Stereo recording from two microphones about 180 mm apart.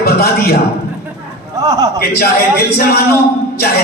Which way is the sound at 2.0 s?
60° left (ahead or behind).